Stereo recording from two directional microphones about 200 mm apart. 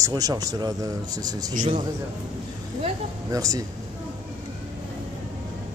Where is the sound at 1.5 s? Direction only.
40° right (ahead or behind).